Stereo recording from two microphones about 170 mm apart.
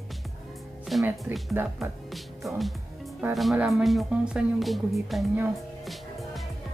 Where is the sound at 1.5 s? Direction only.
15° right (ahead or behind).